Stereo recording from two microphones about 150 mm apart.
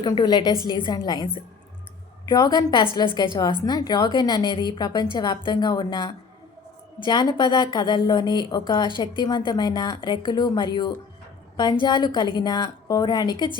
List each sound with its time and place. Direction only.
0.0 s a woman's voice: 30° left (ahead or behind)
0.5 s a woman's voice: 25° right (ahead or behind)
0.9 s a woman's voice: 30° left (ahead or behind)
2.3 s a woman's voice: 25° left (ahead or behind)